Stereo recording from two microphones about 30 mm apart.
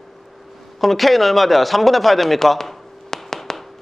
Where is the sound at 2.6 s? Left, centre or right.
Centre.